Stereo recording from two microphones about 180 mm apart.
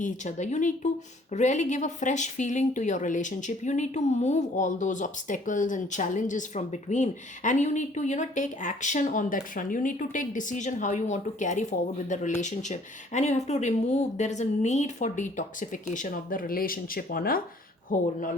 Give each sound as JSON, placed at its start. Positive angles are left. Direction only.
{"t": 0.0, "sound": "a woman's voice", "side_deg": 40}